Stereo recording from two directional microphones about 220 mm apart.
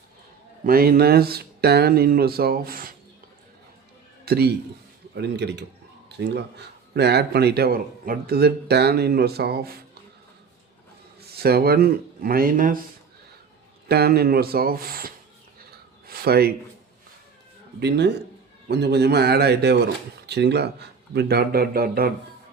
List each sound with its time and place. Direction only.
0.6 s speech: 40° right (ahead or behind)
4.3 s speech: 45° right (ahead or behind)
11.2 s speech: 45° right (ahead or behind)
13.8 s speech: 45° right (ahead or behind)
15.7 s a sound: 45° right (ahead or behind)
17.7 s speech: 50° right (ahead or behind)